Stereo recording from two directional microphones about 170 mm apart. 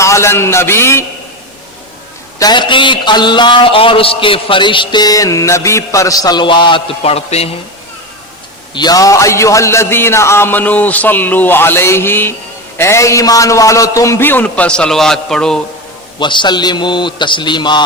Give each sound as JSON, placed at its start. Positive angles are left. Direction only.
{"t": 0.0, "sound": "a man's voice", "side_deg": 15}
{"t": 2.4, "sound": "a man's voice", "side_deg": 25}
{"t": 8.7, "sound": "a man's voice", "side_deg": 25}
{"t": 16.2, "sound": "a man's voice", "side_deg": 25}